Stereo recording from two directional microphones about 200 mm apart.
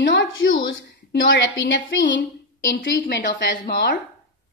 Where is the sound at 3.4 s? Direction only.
60° left (ahead or behind).